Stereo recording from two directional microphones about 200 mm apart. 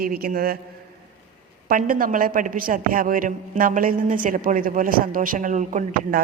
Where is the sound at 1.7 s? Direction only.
45° right (ahead or behind).